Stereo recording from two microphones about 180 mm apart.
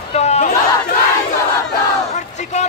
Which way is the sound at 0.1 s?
35° left (ahead or behind).